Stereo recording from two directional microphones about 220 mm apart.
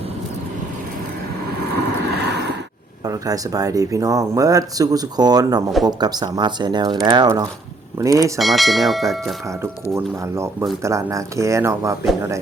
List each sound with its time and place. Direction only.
1.7 s vehicle: 50° right (ahead or behind)
3.0 s speech: 15° right (ahead or behind)
8.4 s speech: centre (ahead or behind)
9.9 s speech: 10° right (ahead or behind)